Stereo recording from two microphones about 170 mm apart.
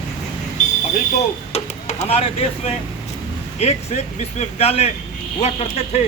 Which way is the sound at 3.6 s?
40° left (ahead or behind).